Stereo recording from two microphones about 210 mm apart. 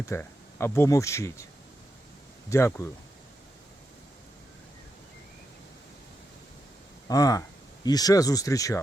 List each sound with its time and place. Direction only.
0.0 s speech: 10° left (ahead or behind)
2.5 s speech: 15° left (ahead or behind)
7.1 s speech: 15° left (ahead or behind)